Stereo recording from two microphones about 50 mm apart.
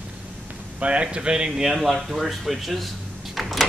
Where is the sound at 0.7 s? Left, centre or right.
Right; by 2.9 s centre.